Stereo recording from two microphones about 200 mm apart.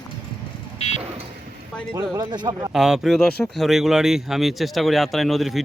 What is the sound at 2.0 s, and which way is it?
Speech, 20° right (ahead or behind).